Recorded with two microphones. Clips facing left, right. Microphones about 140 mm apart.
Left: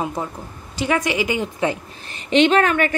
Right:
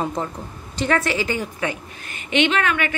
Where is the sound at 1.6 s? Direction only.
35° left (ahead or behind).